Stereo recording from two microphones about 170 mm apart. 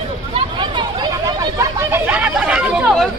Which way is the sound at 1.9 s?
10° right (ahead or behind).